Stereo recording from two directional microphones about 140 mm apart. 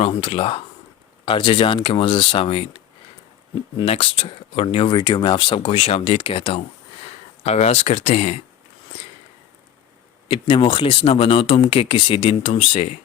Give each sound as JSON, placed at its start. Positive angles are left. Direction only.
{"t": 0.0, "sound": "speech", "side_deg": 45}
{"t": 3.8, "sound": "speech", "side_deg": 40}
{"t": 10.2, "sound": "speech", "side_deg": 40}